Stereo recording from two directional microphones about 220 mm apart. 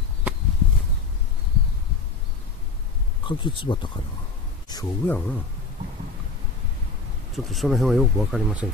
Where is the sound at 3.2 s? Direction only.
20° left (ahead or behind).